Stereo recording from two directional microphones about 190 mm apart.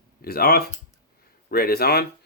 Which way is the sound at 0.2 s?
55° left (ahead or behind).